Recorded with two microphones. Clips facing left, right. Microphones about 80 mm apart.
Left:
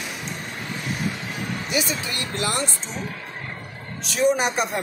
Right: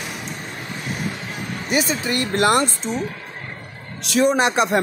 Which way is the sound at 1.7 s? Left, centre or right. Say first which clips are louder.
Right 7 dB; right.